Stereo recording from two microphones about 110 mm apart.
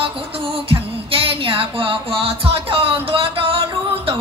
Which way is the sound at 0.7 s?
55° right (ahead or behind).